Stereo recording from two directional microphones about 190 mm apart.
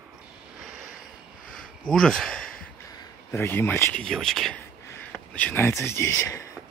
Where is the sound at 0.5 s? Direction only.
5° right (ahead or behind).